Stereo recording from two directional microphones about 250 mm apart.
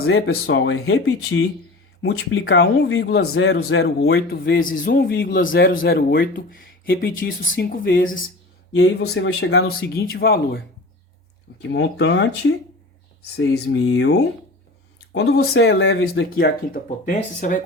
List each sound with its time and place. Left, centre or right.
0.0 s a man's voice: left
8.7 s a man's voice: left
11.7 s a man's voice: left